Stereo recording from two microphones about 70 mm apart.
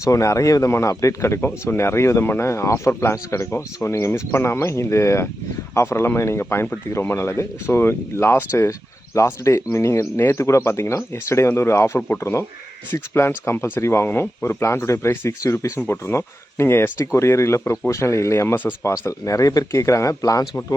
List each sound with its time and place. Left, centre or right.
0.0 s speech: left
19.2 s speech: left